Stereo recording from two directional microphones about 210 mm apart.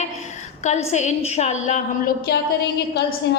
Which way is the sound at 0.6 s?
30° left (ahead or behind).